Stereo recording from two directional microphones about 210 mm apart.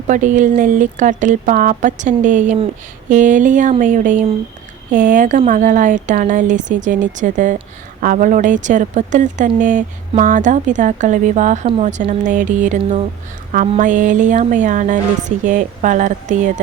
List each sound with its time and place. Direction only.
0.1 s speech: 35° right (ahead or behind)